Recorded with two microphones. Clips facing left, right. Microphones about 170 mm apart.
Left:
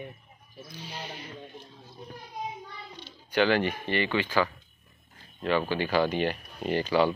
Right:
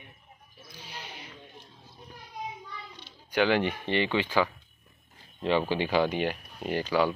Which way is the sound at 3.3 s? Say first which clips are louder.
Left 1 dB; 15° right (ahead or behind).